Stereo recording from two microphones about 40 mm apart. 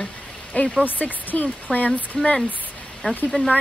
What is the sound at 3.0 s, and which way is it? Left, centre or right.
Speech, left.